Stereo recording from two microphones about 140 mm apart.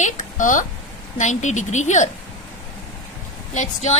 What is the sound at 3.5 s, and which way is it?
Speech, 55° left (ahead or behind).